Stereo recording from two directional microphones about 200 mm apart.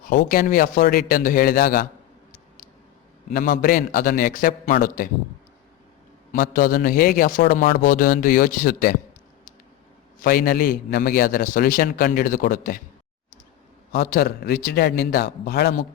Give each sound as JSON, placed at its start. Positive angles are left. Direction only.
{"t": 0.0, "sound": "a man's voice", "side_deg": 45}
{"t": 3.3, "sound": "a man's voice", "side_deg": 45}
{"t": 6.3, "sound": "a man's voice", "side_deg": 45}
{"t": 10.2, "sound": "a man's voice", "side_deg": 45}
{"t": 13.9, "sound": "a man's voice", "side_deg": 50}